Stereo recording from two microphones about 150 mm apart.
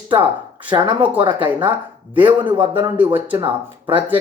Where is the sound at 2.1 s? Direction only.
10° right (ahead or behind).